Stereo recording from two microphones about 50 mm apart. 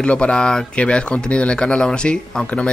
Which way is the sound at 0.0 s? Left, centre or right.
Left.